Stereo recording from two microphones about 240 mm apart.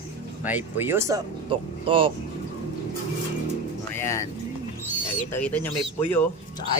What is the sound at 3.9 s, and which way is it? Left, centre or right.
Vehicle, centre.